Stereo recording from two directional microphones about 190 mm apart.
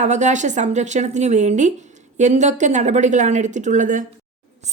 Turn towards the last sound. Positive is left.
turn(degrees=-45)  # may be behind; listen again after turning